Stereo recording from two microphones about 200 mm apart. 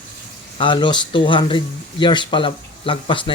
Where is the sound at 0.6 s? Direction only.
25° left (ahead or behind).